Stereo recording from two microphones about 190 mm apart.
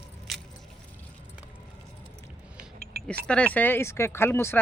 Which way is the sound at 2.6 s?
50° right (ahead or behind).